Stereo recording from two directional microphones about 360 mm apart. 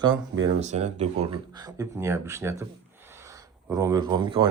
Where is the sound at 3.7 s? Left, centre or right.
Centre.